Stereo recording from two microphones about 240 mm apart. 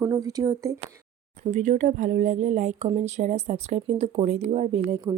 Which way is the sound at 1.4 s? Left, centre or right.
Right.